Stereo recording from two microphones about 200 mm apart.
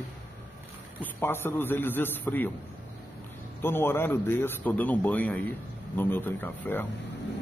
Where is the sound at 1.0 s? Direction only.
10° left (ahead or behind).